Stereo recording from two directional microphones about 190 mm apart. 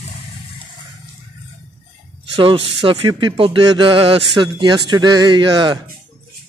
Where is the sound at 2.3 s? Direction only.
30° right (ahead or behind).